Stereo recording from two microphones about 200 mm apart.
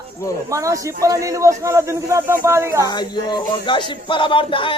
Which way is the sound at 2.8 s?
20° left (ahead or behind).